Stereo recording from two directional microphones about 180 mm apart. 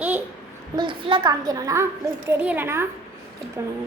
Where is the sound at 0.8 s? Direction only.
30° right (ahead or behind).